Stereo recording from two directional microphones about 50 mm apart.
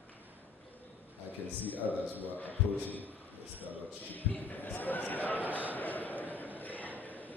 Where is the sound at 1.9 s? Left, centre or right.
Right.